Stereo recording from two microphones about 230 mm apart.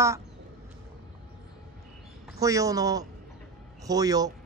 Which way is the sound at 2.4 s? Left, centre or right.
Centre.